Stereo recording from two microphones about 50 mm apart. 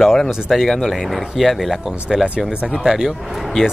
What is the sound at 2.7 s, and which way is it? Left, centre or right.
Speech, centre.